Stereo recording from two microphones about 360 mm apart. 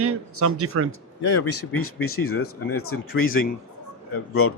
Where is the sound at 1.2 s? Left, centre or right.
Left.